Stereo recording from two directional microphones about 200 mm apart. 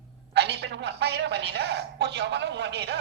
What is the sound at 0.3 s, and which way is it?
Speech, 60° right (ahead or behind).